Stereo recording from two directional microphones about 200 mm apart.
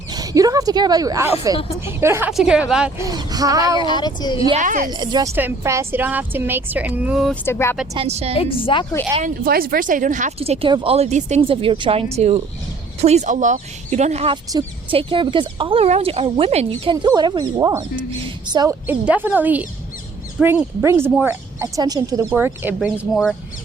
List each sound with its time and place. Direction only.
0.1 s speech: 20° right (ahead or behind)
3.0 s speech: 20° right (ahead or behind)
3.8 s speech: 20° left (ahead or behind)
4.5 s speech: 40° right (ahead or behind)
4.9 s speech: 20° right (ahead or behind); by 7.3 s 5° right (ahead or behind)
7.4 s speech: 10° left (ahead or behind)
7.9 s speech: 30° right (ahead or behind)
8.4 s speech: 25° left (ahead or behind)
9.2 s speech: 45° right (ahead or behind)
14.5 s speech: 20° right (ahead or behind)